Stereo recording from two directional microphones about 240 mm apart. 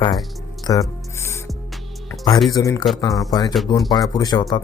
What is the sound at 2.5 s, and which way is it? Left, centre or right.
Speech, centre.